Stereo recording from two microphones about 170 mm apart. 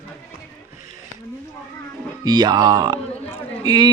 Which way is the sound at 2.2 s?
25° right (ahead or behind).